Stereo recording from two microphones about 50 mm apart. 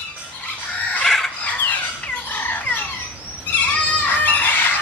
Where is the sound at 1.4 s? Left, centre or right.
Left.